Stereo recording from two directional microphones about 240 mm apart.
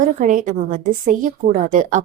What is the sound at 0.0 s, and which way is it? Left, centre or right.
A woman's voice, right.